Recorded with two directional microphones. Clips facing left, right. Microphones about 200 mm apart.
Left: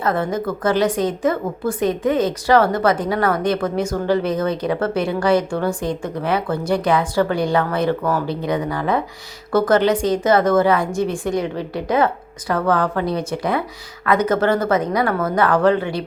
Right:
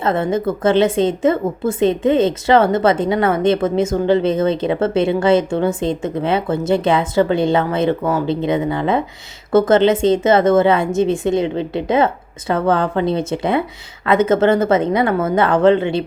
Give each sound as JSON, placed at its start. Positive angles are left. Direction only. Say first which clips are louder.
{"t": 0.0, "sound": "a woman's voice", "louder": "right 3 dB", "side_deg": -25}